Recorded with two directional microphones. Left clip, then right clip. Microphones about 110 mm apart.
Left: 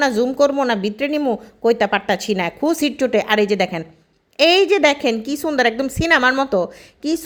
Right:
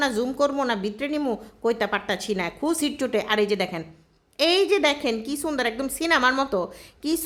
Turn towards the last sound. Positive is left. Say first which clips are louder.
# left 5 dB
turn(degrees=25)  # may be behind; listen again after turning